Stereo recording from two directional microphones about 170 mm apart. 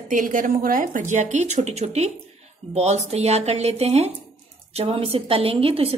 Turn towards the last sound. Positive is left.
turn(degrees=-35)  # may be behind; listen again after turning